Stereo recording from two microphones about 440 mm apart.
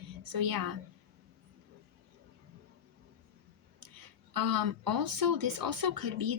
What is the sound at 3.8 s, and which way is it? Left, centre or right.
Speech, right.